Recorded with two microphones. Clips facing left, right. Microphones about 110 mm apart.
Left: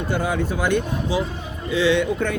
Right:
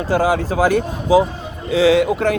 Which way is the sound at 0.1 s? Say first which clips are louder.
Right 7 dB; 90° right.